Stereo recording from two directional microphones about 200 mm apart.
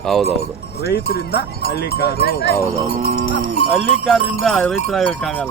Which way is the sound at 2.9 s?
45° right (ahead or behind).